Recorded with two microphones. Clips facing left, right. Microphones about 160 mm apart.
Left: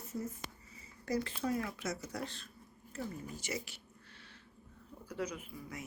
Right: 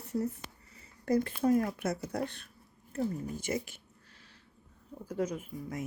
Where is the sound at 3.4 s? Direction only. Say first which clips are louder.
Right 7 dB; 50° right (ahead or behind).